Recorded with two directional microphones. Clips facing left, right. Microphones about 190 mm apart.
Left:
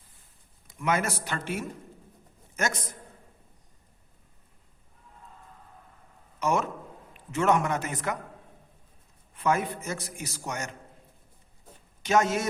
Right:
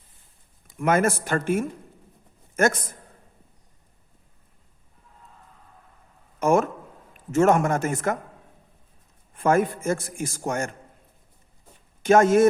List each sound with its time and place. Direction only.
0.8 s a man's voice: 50° right (ahead or behind)
6.4 s a man's voice: 50° right (ahead or behind)
9.3 s a man's voice: 50° right (ahead or behind)
12.0 s a man's voice: 50° right (ahead or behind)